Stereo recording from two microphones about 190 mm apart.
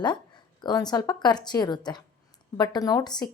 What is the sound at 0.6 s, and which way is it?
Speech, 20° left (ahead or behind).